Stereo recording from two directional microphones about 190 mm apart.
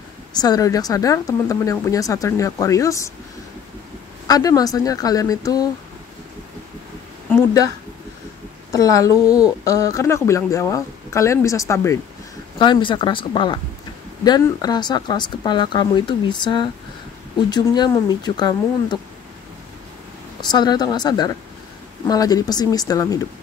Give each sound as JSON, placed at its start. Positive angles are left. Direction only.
{"t": 0.3, "sound": "speech", "side_deg": 20}
{"t": 4.3, "sound": "speech", "side_deg": 20}
{"t": 7.2, "sound": "a woman's voice", "side_deg": 20}
{"t": 8.7, "sound": "speech", "side_deg": 20}
{"t": 20.3, "sound": "speech", "side_deg": 20}